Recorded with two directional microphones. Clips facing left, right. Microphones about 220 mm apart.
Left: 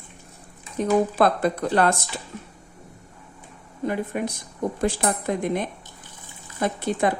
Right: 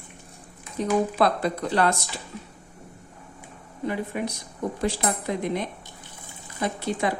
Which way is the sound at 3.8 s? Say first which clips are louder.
Left 2 dB; 50° left (ahead or behind).